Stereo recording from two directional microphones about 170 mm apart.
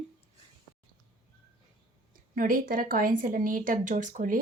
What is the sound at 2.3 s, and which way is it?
Speech, 55° right (ahead or behind).